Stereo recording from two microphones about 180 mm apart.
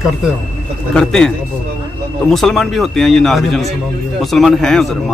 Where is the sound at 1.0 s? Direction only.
5° left (ahead or behind).